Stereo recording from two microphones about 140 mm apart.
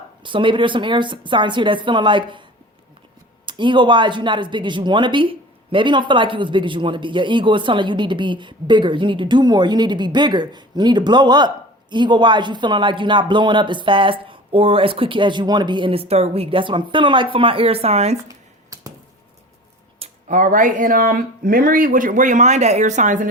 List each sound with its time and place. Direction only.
0.2 s speech: 35° right (ahead or behind)
3.4 s speech: 35° right (ahead or behind)
18.3 s a sound: 25° right (ahead or behind)
20.2 s speech: 65° right (ahead or behind)